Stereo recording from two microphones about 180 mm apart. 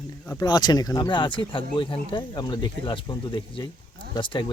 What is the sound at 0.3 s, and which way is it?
Speech, 20° left (ahead or behind).